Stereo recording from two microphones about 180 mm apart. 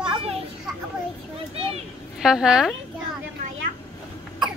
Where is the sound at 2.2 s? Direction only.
5° right (ahead or behind).